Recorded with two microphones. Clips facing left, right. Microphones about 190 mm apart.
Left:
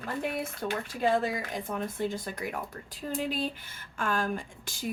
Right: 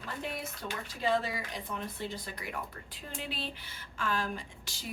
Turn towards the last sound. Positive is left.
turn(degrees=50)  # may be behind; listen again after turning